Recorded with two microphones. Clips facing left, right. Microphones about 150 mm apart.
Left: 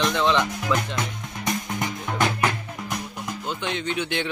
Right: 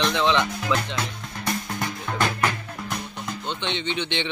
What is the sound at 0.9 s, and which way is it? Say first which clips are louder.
Music: left 1 dB; 15° left (ahead or behind).